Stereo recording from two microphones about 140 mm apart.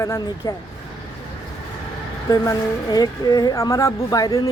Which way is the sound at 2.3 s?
30° left (ahead or behind).